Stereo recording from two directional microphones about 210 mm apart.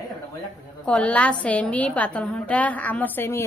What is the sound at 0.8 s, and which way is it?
A woman's voice, 5° left (ahead or behind).